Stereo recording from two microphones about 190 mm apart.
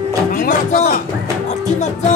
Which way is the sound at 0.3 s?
45° left (ahead or behind).